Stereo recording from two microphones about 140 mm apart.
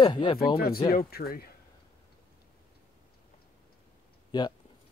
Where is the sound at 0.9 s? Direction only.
90° left.